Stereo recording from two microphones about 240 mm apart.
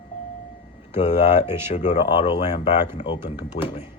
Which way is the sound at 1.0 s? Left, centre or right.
Left.